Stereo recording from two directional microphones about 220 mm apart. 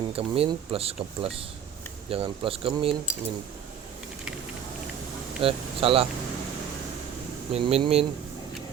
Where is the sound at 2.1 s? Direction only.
25° right (ahead or behind).